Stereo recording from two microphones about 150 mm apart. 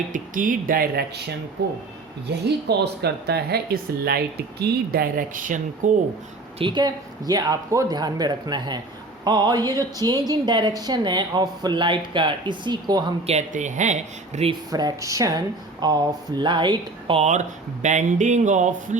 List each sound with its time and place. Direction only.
0.1 s speech: 65° right (ahead or behind)
6.6 s speech: 30° right (ahead or behind)
13.2 s speech: 50° right (ahead or behind)
14.7 s speech: 25° right (ahead or behind)
17.8 s speech: 55° right (ahead or behind)